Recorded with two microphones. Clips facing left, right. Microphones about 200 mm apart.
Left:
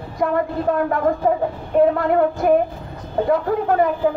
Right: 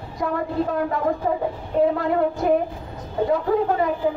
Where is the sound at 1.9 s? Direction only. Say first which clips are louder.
Left 3 dB; 55° left (ahead or behind).